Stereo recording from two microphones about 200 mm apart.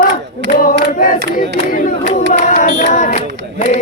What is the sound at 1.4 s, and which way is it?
Speech, 40° left (ahead or behind).